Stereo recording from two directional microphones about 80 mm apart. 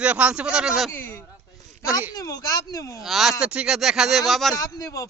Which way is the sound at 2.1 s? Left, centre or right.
Left.